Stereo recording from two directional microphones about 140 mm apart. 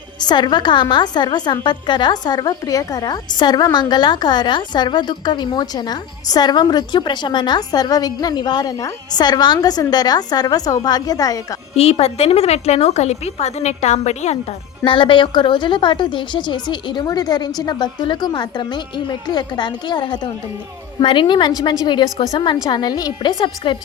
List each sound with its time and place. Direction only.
0.2 s a woman's voice: 30° left (ahead or behind)
11.7 s a woman's voice: 45° left (ahead or behind)
14.8 s a woman's voice: 35° left (ahead or behind)
23.6 s a woman's voice: 35° left (ahead or behind)